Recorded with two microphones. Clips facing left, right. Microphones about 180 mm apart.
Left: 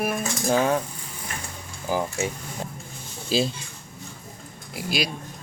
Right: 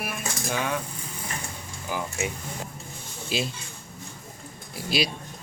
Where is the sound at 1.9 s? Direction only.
35° left (ahead or behind).